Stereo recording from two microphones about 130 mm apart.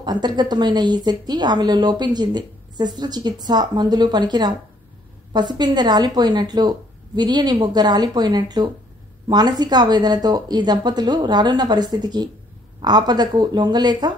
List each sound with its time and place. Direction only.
0.0 s a woman's voice: 35° right (ahead or behind)